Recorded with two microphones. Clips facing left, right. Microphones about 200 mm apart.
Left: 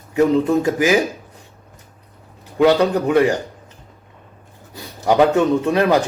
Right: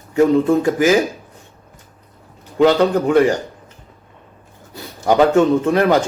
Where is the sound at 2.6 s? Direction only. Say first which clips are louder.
Right 1 dB; 15° left (ahead or behind).